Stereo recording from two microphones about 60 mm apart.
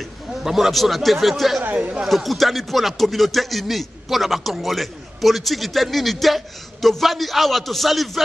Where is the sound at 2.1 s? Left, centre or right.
Centre.